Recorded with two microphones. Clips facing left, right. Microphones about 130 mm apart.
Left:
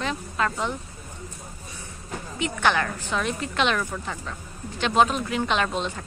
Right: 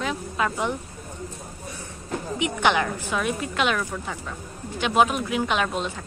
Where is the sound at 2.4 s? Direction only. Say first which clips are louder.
Right 1 dB; 15° right (ahead or behind).